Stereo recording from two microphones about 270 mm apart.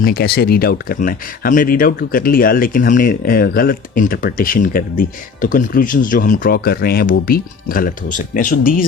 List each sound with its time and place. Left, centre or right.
0.0 s speech: left